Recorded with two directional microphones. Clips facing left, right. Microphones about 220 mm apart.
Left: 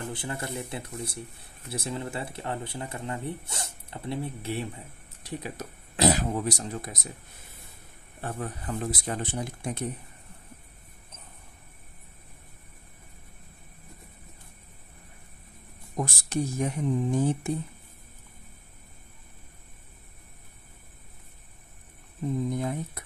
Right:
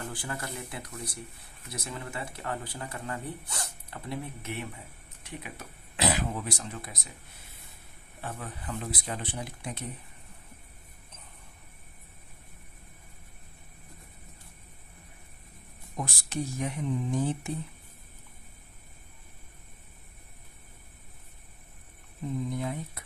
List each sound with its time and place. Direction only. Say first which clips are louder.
0.0 s speech: left 3 dB; 25° left (ahead or behind); by 7.0 s 40° left (ahead or behind)
8.2 s speech: left 5 dB; 45° left (ahead or behind)
16.0 s speech: left 5 dB; 45° left (ahead or behind)
22.6 s speech: left 3 dB; 45° left (ahead or behind)